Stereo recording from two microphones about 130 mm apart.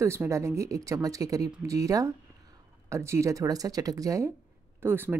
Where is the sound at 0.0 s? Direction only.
20° right (ahead or behind).